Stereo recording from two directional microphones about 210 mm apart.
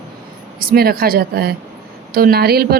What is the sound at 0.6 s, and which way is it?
Speech, 45° right (ahead or behind).